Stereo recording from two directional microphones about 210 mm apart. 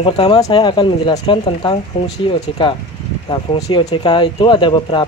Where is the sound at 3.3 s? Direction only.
20° left (ahead or behind).